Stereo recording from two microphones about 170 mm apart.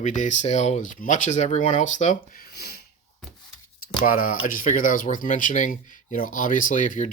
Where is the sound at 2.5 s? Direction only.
70° left (ahead or behind).